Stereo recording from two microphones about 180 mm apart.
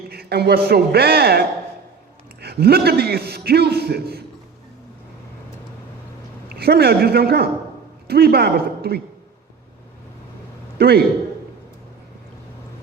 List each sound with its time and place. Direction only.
0.1 s a man's voice: 60° right (ahead or behind)
6.5 s a man's voice: 60° right (ahead or behind)
10.8 s a man's voice: 60° right (ahead or behind)